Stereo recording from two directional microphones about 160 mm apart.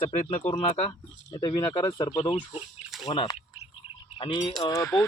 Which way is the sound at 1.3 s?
25° left (ahead or behind).